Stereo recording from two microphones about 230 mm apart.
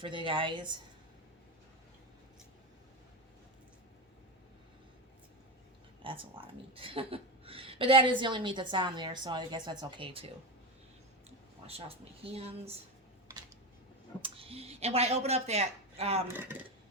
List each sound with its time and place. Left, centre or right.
0.0 s speech: right
6.0 s speech: right
11.6 s speech: right
14.2 s speech: right
16.2 s speech: centre